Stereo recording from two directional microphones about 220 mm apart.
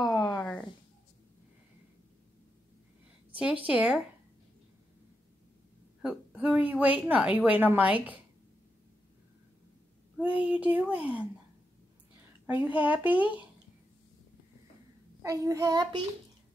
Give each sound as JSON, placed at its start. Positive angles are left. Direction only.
{"t": 0.0, "sound": "a sound", "side_deg": 15}
{"t": 0.3, "sound": "a sound", "side_deg": 5}
{"t": 3.3, "sound": "speech", "side_deg": -5}
{"t": 6.0, "sound": "a woman's voice", "side_deg": -5}
{"t": 10.2, "sound": "a woman's voice", "side_deg": -5}
{"t": 12.4, "sound": "a woman's voice", "side_deg": -5}
{"t": 15.2, "sound": "a woman's voice", "side_deg": -15}